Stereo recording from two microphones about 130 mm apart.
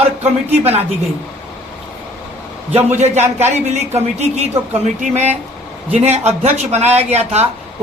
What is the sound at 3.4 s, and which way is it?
Speech, 60° right (ahead or behind).